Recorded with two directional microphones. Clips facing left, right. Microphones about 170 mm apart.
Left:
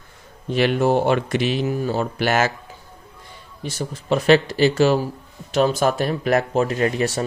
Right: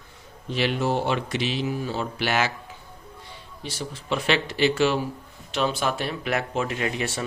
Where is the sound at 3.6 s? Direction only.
45° left (ahead or behind).